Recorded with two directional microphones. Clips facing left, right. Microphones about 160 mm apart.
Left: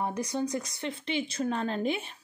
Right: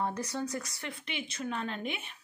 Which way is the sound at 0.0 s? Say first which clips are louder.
Left 3 dB; 15° left (ahead or behind).